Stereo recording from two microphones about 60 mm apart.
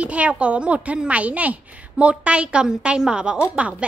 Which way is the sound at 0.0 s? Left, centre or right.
Right.